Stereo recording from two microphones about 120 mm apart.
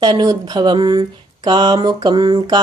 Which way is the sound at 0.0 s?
35° right (ahead or behind).